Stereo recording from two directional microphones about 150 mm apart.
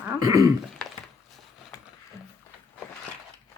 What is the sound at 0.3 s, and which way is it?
Speech, 25° right (ahead or behind).